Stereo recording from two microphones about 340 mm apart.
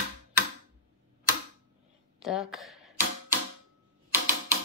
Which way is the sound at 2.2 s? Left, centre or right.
Centre.